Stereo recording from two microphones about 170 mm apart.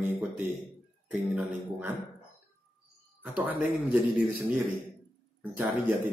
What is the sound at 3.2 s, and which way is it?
Speech, 10° right (ahead or behind).